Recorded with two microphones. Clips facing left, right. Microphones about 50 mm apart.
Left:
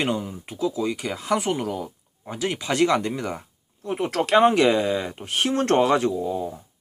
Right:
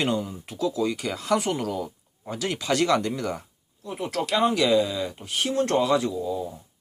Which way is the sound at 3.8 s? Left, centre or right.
Left.